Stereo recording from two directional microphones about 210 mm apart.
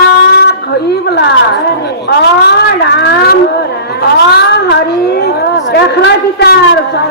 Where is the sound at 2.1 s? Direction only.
50° left (ahead or behind).